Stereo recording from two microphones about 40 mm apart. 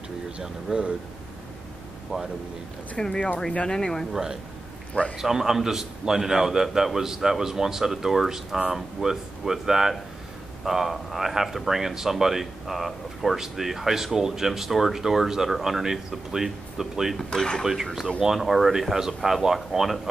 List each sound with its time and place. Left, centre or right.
0.4 s speech: centre
3.0 s speech: centre
4.1 s speech: centre
17.2 s speech: centre
18.2 s speech: centre